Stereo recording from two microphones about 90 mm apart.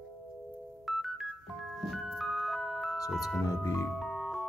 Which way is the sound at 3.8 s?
5° left (ahead or behind).